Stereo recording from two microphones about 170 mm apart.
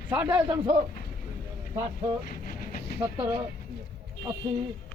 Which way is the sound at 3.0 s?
10° right (ahead or behind).